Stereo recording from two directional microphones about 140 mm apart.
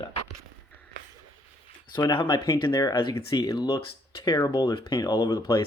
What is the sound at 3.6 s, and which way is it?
Speech, 40° left (ahead or behind).